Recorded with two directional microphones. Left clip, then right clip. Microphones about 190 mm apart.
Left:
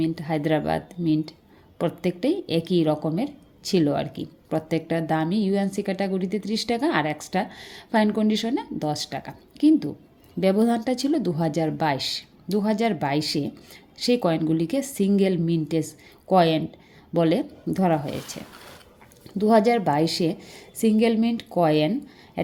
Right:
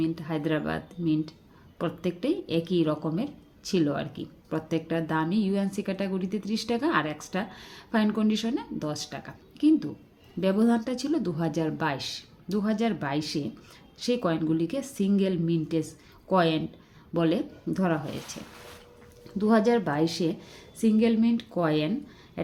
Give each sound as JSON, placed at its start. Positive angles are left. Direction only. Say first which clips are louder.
{"t": 0.0, "sound": "a woman's voice", "louder": "left 4 dB", "side_deg": 25}
{"t": 19.4, "sound": "a woman's voice", "louder": "left 5 dB", "side_deg": 25}